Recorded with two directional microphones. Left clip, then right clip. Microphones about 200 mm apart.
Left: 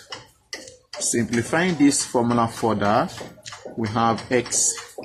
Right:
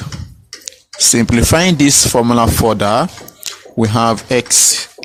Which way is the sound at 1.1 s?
45° right (ahead or behind).